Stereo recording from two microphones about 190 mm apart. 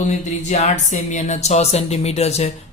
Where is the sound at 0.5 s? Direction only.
35° left (ahead or behind).